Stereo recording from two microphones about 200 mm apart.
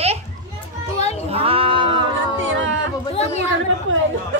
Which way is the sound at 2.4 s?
70° right (ahead or behind).